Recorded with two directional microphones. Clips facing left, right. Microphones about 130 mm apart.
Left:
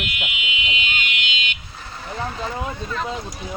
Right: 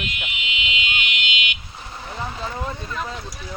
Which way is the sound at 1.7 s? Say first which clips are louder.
Even; 15° right (ahead or behind).